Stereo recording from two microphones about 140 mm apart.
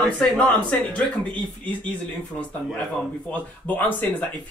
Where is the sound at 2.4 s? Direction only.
10° left (ahead or behind).